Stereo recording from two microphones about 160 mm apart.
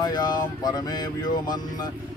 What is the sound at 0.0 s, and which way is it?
Speech, 25° left (ahead or behind).